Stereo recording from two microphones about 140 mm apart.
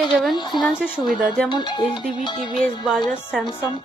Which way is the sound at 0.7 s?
5° right (ahead or behind).